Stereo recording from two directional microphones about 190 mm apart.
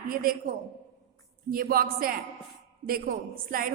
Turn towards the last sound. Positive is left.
turn(degrees=-50)  # may be behind; listen again after turning